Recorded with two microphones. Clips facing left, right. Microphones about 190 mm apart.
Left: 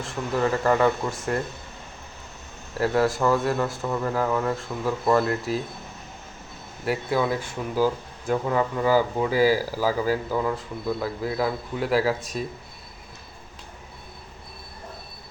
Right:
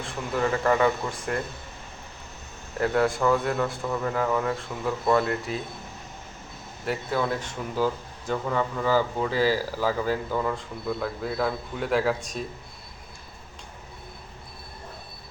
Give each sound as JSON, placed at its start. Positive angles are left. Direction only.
{"t": 0.0, "sound": "speech", "side_deg": 0}
{"t": 2.8, "sound": "speech", "side_deg": 5}
{"t": 6.8, "sound": "speech", "side_deg": 10}